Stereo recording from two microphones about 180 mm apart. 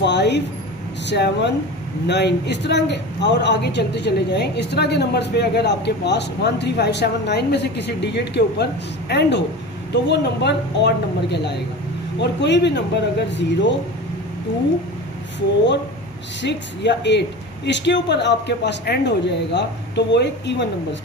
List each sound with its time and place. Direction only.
0.0 s a sound: 70° left (ahead or behind)
1.0 s speech: 70° left (ahead or behind)
16.4 s speech: 75° left (ahead or behind)